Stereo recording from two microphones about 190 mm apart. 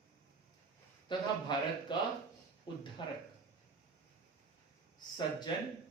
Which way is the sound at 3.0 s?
25° left (ahead or behind).